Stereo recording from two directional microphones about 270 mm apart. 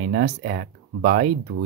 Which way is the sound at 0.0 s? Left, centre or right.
Right.